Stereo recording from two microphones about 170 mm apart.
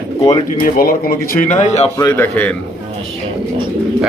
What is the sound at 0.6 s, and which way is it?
Speech, 60° left (ahead or behind).